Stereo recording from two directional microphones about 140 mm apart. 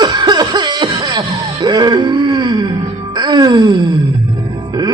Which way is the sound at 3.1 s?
30° right (ahead or behind).